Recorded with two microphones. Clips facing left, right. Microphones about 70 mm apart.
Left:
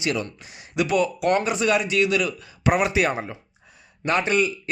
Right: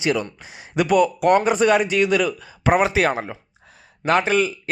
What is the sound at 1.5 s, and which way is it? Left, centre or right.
Speech, right.